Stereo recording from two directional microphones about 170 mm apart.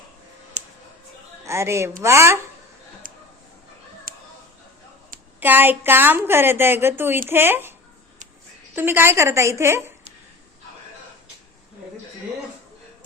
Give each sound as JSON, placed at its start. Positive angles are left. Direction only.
{"t": 0.6, "sound": "music", "side_deg": -40}
{"t": 1.5, "sound": "a woman's voice", "side_deg": -15}
{"t": 4.1, "sound": "a sound", "side_deg": -55}
{"t": 5.4, "sound": "a woman's voice", "side_deg": -10}
{"t": 8.7, "sound": "a woman's voice", "side_deg": -15}